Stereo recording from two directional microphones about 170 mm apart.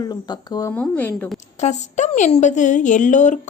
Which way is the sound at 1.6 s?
45° left (ahead or behind).